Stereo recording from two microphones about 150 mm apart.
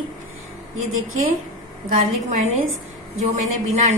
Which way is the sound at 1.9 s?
60° right (ahead or behind).